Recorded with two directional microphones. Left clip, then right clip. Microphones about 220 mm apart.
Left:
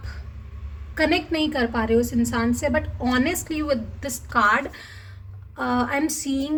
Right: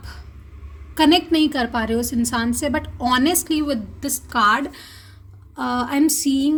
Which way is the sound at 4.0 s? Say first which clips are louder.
Right 4 dB; 40° right (ahead or behind).